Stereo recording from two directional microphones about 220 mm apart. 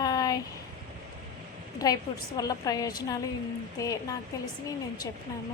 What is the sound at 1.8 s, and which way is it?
A woman's voice, 15° left (ahead or behind).